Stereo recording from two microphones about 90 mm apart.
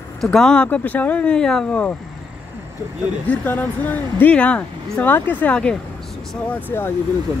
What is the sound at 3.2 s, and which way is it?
Speech, 20° left (ahead or behind).